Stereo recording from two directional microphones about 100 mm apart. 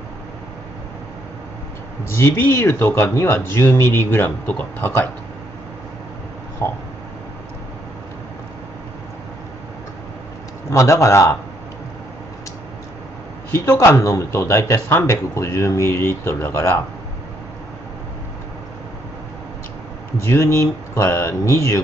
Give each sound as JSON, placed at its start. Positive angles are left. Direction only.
{"t": 2.1, "sound": "speech", "side_deg": 25}
{"t": 6.6, "sound": "speech", "side_deg": 25}
{"t": 10.7, "sound": "a man's voice", "side_deg": 30}
{"t": 13.5, "sound": "speech", "side_deg": 30}
{"t": 20.2, "sound": "speech", "side_deg": 30}